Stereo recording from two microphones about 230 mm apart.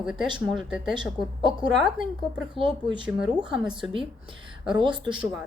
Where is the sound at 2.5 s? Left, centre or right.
Right.